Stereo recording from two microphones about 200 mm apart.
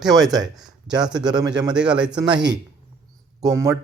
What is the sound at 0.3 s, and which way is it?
Speech, centre (ahead or behind).